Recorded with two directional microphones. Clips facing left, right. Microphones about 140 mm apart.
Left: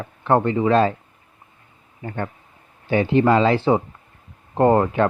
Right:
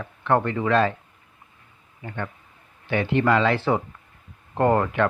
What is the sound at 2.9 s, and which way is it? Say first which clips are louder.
Speech: left 4 dB; 30° left (ahead or behind).